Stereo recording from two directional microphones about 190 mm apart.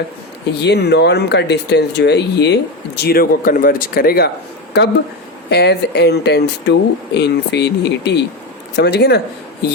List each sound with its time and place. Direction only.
0.6 s speech: 60° left (ahead or behind)
5.5 s speech: 60° left (ahead or behind)